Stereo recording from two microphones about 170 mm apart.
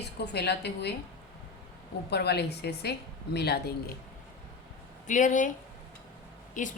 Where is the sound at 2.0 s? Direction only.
75° left (ahead or behind).